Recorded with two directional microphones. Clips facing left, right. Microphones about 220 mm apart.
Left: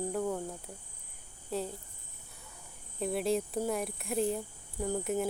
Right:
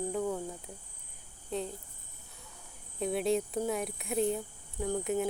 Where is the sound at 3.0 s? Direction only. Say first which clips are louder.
Right 1 dB; centre (ahead or behind).